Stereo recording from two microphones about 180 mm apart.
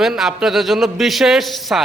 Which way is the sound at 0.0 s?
Centre (ahead or behind).